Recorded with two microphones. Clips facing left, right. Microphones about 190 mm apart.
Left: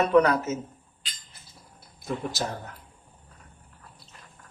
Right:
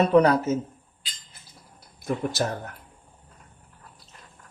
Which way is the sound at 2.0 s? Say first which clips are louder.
Right 4 dB; 55° right (ahead or behind).